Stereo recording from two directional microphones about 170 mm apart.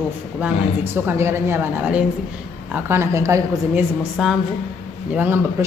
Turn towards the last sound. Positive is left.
turn(degrees=-10)  # may be behind; listen again after turning